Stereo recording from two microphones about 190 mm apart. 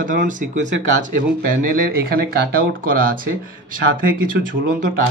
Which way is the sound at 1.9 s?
55° right (ahead or behind).